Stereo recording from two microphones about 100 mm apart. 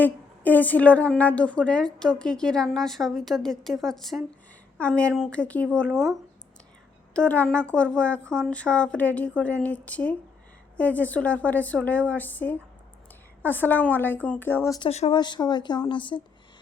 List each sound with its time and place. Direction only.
0.0 s a woman's voice: 20° left (ahead or behind); by 4.2 s centre (ahead or behind)
4.8 s speech: 10° left (ahead or behind)
7.1 s a woman's voice: 15° left (ahead or behind)
14.8 s speech: 90° left
15.1 s a woman's voice: 50° left (ahead or behind)